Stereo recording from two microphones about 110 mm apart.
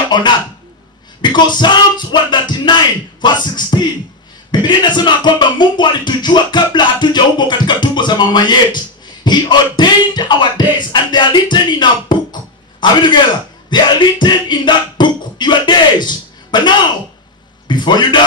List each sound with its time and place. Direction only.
0.1 s speech: 40° left (ahead or behind)
1.2 s music: 40° left (ahead or behind)
4.6 s music: 45° left (ahead or behind)
13.7 s a sound: 45° left (ahead or behind)
17.6 s music: 45° left (ahead or behind)